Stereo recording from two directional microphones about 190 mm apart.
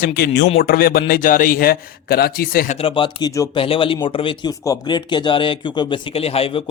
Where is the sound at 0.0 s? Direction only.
55° left (ahead or behind).